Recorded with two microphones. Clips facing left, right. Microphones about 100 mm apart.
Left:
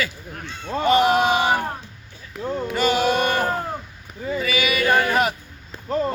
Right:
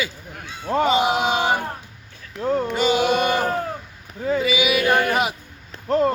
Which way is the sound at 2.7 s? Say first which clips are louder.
Left 2 dB; 20° right (ahead or behind).